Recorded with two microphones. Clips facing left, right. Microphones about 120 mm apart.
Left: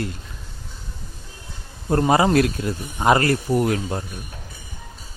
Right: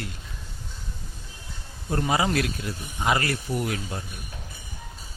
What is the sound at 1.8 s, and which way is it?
Speech, 50° left (ahead or behind).